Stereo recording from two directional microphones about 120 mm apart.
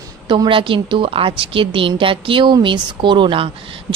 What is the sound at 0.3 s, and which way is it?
A woman's voice, 45° right (ahead or behind).